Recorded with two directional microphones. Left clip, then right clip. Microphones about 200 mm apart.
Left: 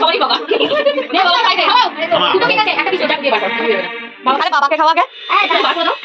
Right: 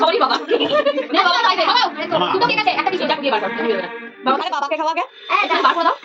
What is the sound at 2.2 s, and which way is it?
Speech, 40° right (ahead or behind).